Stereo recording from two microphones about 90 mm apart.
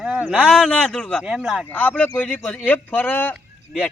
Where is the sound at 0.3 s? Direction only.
5° left (ahead or behind).